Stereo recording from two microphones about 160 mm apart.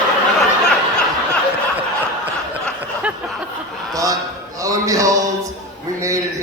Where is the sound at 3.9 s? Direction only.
20° right (ahead or behind).